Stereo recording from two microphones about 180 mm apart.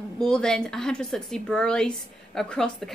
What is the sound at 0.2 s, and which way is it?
Speech, 5° left (ahead or behind).